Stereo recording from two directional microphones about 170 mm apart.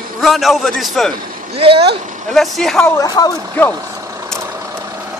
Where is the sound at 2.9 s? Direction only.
20° left (ahead or behind).